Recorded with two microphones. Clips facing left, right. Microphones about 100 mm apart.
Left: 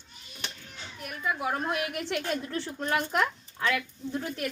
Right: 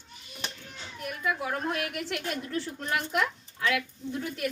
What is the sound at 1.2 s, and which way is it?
A woman's voice, 20° left (ahead or behind).